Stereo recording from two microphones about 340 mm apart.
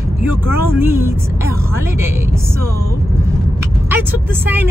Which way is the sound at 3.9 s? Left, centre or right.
Centre.